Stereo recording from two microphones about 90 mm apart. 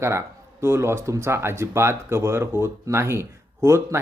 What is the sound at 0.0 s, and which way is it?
Speech, 30° right (ahead or behind).